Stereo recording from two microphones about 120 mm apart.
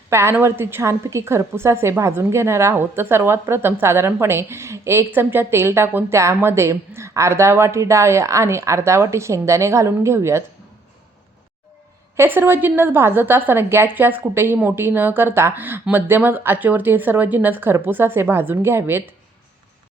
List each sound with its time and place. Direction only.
0.1 s a woman's voice: 20° right (ahead or behind)
12.1 s a woman's voice: 20° right (ahead or behind)